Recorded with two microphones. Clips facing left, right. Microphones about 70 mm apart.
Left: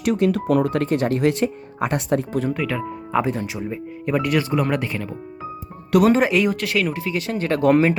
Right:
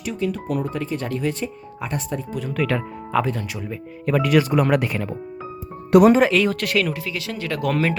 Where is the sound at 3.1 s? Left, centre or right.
Centre.